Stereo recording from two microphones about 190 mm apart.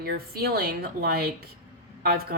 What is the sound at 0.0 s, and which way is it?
Speech, 55° right (ahead or behind).